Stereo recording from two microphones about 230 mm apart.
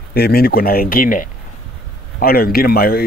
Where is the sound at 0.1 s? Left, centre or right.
Left.